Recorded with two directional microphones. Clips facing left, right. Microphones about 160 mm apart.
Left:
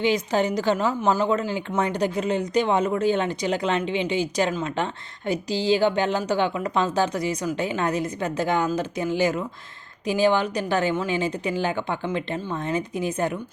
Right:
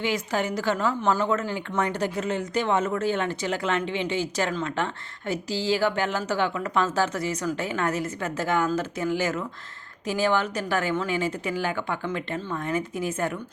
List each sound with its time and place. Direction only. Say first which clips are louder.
0.0 s a woman's voice: left 5 dB; 20° left (ahead or behind)